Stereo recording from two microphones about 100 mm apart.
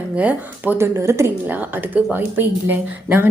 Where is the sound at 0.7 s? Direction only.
25° right (ahead or behind).